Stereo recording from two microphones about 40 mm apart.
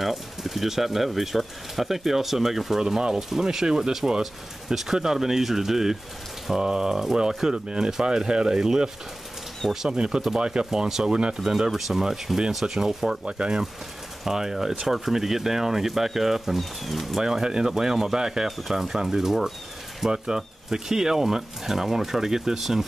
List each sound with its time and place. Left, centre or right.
0.0 s speech: centre
11.1 s speech: right
11.3 s speech: centre
13.3 s speech: right
14.2 s speech: centre
17.2 s speech: centre
18.6 s speech: centre